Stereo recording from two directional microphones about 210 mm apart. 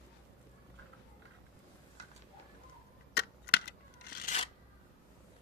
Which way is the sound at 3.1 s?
50° left (ahead or behind).